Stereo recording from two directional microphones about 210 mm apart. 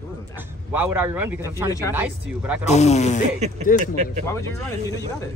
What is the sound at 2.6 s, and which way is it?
Speech, 30° left (ahead or behind).